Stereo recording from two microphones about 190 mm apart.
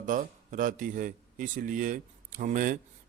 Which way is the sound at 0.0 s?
45° right (ahead or behind).